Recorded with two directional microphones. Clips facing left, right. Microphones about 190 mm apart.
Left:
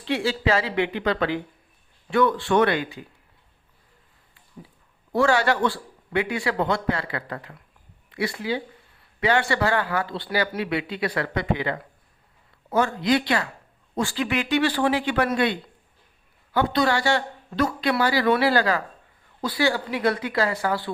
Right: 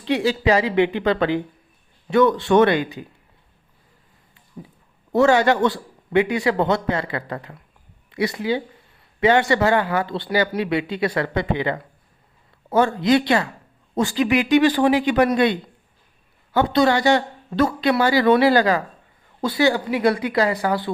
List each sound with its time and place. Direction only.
0.0 s speech: 20° right (ahead or behind)
4.6 s a sound: 25° right (ahead or behind)
5.1 s a woman's voice: 20° right (ahead or behind)
16.6 s a woman's voice: 25° right (ahead or behind)